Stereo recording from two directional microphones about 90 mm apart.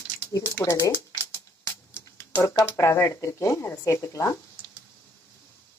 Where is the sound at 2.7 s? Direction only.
30° left (ahead or behind).